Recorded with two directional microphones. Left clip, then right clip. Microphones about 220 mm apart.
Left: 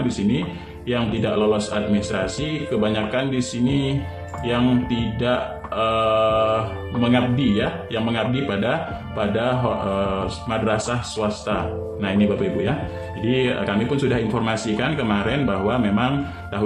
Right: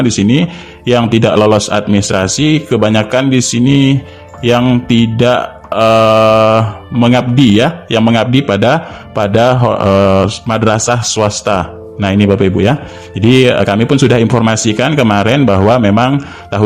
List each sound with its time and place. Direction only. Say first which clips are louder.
0.9 s a man's voice: right 13 dB; 50° right (ahead or behind)